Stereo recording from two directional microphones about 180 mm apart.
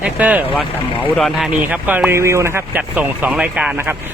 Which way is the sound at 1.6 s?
10° right (ahead or behind).